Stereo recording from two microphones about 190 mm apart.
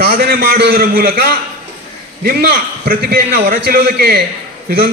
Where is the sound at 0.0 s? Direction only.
55° right (ahead or behind).